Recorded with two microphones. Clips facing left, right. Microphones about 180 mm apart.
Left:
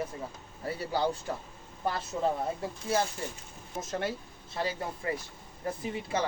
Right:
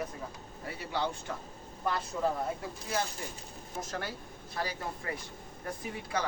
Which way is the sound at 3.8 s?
20° left (ahead or behind).